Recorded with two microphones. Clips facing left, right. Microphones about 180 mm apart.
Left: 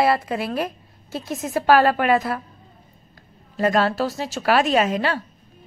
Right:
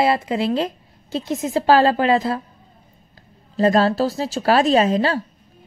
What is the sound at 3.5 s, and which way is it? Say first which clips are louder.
Speech: right 3 dB; 30° right (ahead or behind).